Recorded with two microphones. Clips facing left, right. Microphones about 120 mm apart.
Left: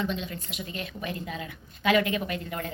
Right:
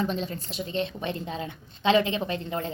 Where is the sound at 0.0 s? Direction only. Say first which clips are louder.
Right 3 dB; 35° right (ahead or behind).